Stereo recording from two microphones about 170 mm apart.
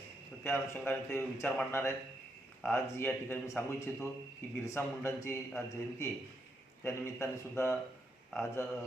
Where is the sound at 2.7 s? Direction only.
10° left (ahead or behind).